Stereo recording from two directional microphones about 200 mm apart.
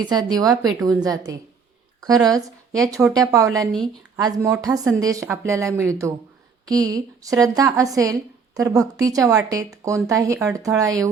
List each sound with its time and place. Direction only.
0.0 s speech: 20° right (ahead or behind)